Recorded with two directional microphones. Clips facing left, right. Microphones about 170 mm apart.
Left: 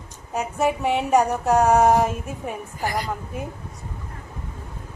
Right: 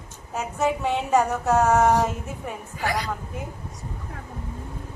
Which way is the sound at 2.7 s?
80° right.